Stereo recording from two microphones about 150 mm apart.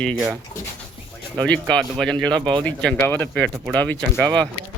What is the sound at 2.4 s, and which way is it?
Speech, 30° right (ahead or behind).